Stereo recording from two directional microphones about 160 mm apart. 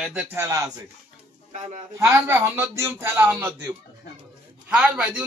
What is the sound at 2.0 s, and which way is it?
A man's voice, 15° right (ahead or behind).